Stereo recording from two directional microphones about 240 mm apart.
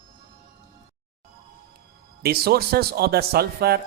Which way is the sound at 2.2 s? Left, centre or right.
Right.